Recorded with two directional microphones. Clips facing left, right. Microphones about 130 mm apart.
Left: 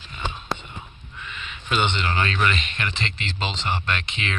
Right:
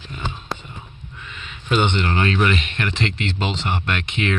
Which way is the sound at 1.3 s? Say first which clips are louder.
Right 5 dB; 40° right (ahead or behind).